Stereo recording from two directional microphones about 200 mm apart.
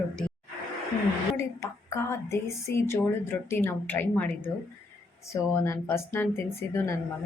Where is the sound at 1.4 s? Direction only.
15° left (ahead or behind).